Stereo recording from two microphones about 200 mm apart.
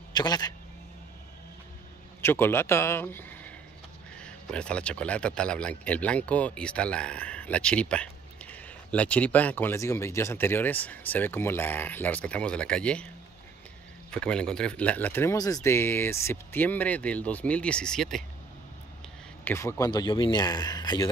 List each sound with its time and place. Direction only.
0.1 s speech: 20° left (ahead or behind)
2.2 s speech: 10° left (ahead or behind)
14.1 s speech: 5° left (ahead or behind)
19.4 s speech: 10° left (ahead or behind)